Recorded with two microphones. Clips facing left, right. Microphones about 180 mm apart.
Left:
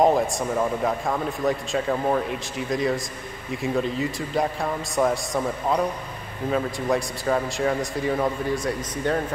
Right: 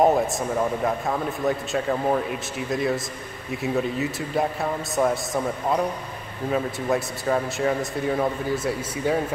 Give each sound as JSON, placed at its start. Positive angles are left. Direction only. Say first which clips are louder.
{"t": 0.0, "sound": "a man's voice", "louder": "even", "side_deg": 0}